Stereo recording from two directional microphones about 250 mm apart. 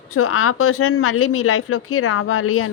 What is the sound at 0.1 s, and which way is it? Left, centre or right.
Speech, left.